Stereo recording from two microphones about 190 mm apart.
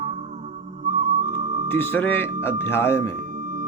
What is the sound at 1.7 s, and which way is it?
Speech, 10° left (ahead or behind).